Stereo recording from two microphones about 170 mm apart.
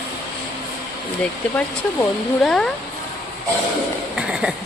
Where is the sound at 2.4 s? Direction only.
5° left (ahead or behind).